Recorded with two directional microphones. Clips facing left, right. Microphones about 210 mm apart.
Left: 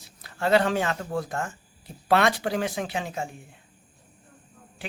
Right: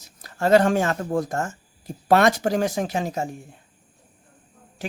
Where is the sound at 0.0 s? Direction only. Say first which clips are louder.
Right 4 dB; 45° right (ahead or behind).